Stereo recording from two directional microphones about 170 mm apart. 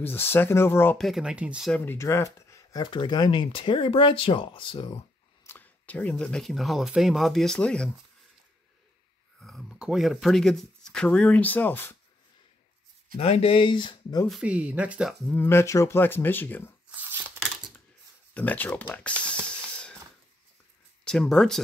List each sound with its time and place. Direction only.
0.0 s speech: 15° left (ahead or behind)
0.9 s speech: centre (ahead or behind)
1.9 s speech: 15° left (ahead or behind)
5.4 s speech: 10° left (ahead or behind)
9.4 s speech: centre (ahead or behind)
13.1 s speech: 35° left (ahead or behind)
14.3 s speech: 5° right (ahead or behind)
15.2 s speech: 15° left (ahead or behind)
18.3 s speech: 10° left (ahead or behind)
19.4 s a sound: 5° left (ahead or behind)
21.0 s speech: 5° left (ahead or behind)